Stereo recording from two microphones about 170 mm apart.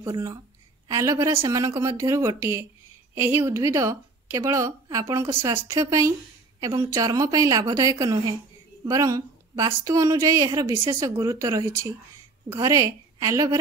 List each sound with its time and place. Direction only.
0.0 s a woman's voice: 20° right (ahead or behind)